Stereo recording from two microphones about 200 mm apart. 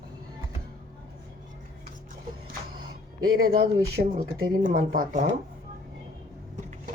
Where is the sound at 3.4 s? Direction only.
50° right (ahead or behind).